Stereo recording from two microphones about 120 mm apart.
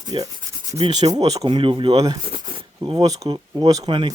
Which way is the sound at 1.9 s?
30° right (ahead or behind).